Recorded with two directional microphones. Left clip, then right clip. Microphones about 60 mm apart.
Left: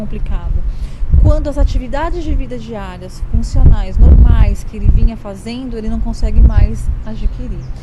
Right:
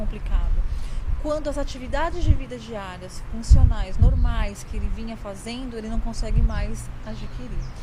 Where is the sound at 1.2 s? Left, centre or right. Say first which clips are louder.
Left 6 dB; left.